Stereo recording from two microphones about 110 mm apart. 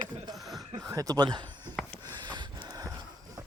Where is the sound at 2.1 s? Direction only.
40° right (ahead or behind).